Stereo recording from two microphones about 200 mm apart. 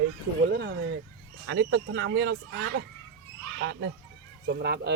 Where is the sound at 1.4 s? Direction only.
70° right (ahead or behind).